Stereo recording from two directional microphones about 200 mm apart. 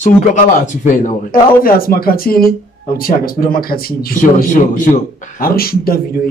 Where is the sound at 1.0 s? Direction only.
45° left (ahead or behind).